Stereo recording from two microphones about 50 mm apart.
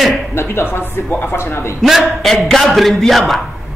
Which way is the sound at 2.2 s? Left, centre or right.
Centre.